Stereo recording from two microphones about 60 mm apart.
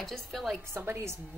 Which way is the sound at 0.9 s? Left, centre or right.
Right.